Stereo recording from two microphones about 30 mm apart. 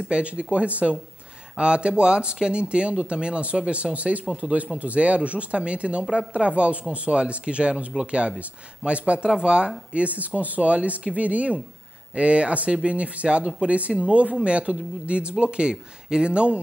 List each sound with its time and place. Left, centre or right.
0.1 s speech: right
9.9 s speech: right